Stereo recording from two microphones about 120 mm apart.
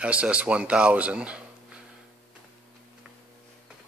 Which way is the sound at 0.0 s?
10° right (ahead or behind).